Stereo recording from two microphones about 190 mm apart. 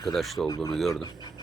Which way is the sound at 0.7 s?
Centre (ahead or behind).